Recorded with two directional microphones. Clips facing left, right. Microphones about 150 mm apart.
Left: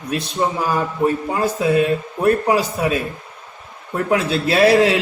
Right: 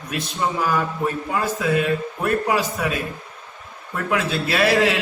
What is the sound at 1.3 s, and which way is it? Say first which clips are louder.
A man's voice: left 3 dB; 30° left (ahead or behind).